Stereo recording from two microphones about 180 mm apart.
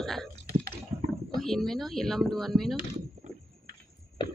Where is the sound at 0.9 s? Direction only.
35° right (ahead or behind).